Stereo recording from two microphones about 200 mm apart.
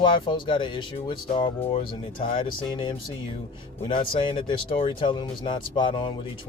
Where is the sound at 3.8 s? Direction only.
25° left (ahead or behind).